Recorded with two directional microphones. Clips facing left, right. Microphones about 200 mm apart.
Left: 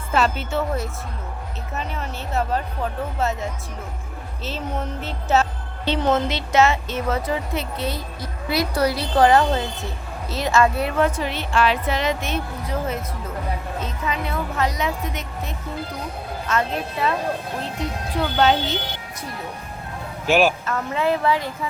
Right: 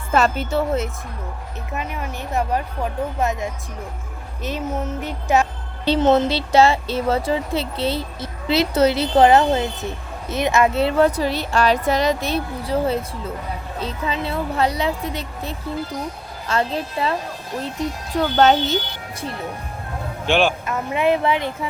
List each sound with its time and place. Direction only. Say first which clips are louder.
0.1 s speech: right 3 dB; 45° right (ahead or behind)
1.7 s speech: right 2 dB; 10° right (ahead or behind)
5.8 s speech: right 5 dB; 35° right (ahead or behind); by 10.8 s 20° right (ahead or behind)
10.8 s speech: right 4 dB; 35° right (ahead or behind)
18.2 s speech: right 3 dB; 45° right (ahead or behind)
20.2 s a man's voice: left 1 dB; 5° left (ahead or behind)
20.7 s speech: right 3 dB; 15° right (ahead or behind)